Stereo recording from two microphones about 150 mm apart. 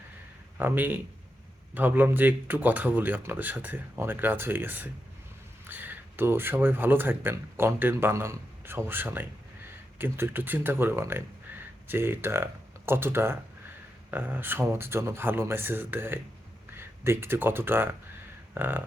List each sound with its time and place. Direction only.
0.6 s speech: 10° right (ahead or behind)